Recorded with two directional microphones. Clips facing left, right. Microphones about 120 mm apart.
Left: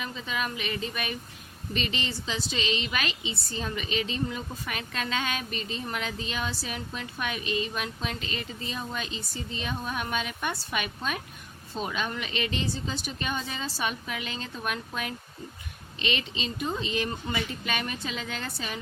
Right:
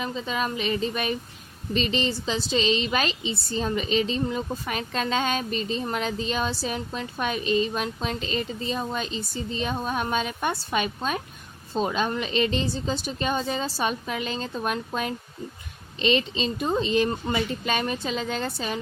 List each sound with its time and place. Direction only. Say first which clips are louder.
0.0 s a woman's voice: right 5 dB; 30° right (ahead or behind)